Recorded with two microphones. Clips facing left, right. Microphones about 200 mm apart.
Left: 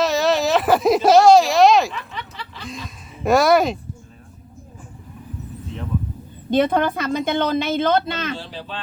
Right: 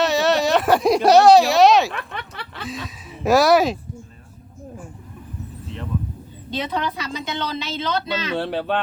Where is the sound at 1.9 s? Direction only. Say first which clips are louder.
Right 1 dB; 60° right (ahead or behind).